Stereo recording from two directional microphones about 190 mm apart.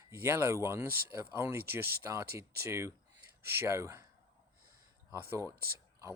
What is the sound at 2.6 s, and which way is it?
Speech, 15° right (ahead or behind).